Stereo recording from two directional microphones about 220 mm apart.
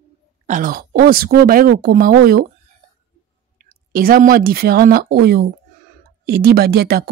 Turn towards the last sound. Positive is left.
turn(degrees=-45)  # may be behind; listen again after turning